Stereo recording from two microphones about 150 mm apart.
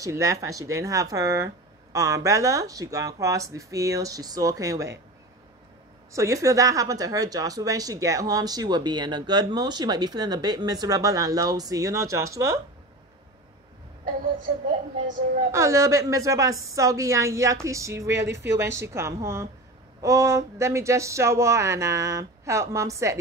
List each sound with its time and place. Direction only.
0.0 s speech: 20° right (ahead or behind)
6.1 s speech: 20° right (ahead or behind)
15.5 s speech: 20° right (ahead or behind)